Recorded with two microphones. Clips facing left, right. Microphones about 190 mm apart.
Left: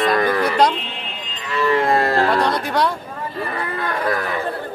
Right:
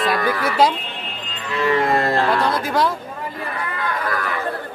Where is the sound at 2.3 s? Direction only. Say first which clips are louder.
Left 1 dB; centre (ahead or behind).